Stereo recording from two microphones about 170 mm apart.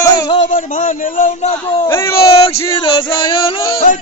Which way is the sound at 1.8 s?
15° left (ahead or behind).